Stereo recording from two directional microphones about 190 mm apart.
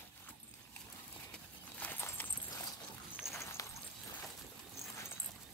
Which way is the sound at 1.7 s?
10° left (ahead or behind).